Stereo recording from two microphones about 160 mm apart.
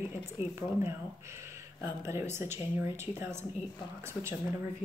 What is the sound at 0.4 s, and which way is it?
Speech, 15° right (ahead or behind).